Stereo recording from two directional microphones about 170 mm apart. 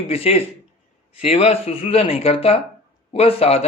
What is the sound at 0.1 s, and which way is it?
A man's voice, 35° left (ahead or behind).